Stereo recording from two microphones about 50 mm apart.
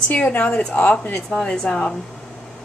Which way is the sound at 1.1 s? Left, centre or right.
Centre.